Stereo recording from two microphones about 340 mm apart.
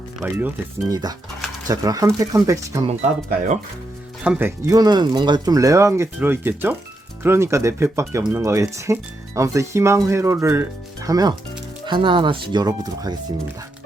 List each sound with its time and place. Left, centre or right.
0.2 s speech: centre
3.2 s speech: right
4.2 s speech: centre